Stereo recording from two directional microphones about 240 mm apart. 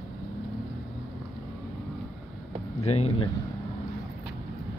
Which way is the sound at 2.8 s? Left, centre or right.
Left.